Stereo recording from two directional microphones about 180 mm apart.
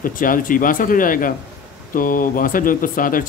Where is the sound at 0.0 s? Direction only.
50° left (ahead or behind).